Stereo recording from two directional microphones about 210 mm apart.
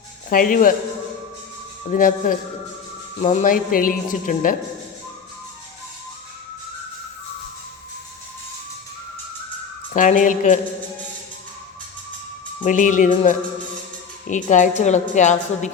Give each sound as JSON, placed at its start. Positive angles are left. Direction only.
{"t": 0.3, "sound": "a woman's voice", "side_deg": 40}
{"t": 1.9, "sound": "a woman's voice", "side_deg": 40}
{"t": 9.9, "sound": "a woman's voice", "side_deg": 40}
{"t": 12.6, "sound": "a woman's voice", "side_deg": 35}